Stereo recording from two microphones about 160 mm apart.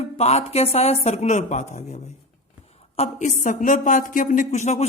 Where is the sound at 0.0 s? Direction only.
40° left (ahead or behind).